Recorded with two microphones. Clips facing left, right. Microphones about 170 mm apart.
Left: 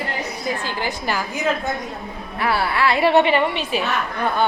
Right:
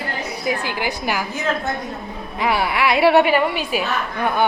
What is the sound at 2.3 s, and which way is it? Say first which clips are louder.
A woman's voice: right 1 dB; 15° right (ahead or behind).